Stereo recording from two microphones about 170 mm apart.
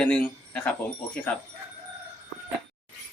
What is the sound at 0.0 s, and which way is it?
Speech, 10° left (ahead or behind).